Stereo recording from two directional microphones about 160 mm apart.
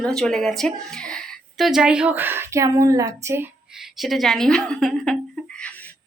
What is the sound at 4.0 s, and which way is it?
Speech, centre (ahead or behind).